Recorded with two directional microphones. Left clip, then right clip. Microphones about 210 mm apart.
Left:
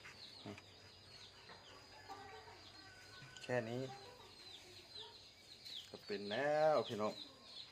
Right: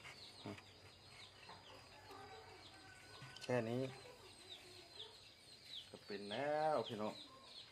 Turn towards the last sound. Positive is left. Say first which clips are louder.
# left 4 dB
turn(degrees=30)  # may be behind; listen again after turning